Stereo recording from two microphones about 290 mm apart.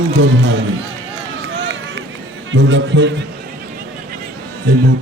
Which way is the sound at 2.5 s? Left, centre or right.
Right.